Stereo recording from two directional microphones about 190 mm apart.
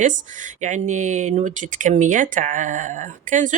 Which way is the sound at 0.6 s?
40° right (ahead or behind).